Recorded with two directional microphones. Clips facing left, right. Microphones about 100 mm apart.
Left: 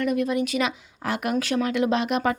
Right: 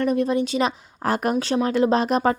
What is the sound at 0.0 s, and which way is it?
Speech, 30° right (ahead or behind).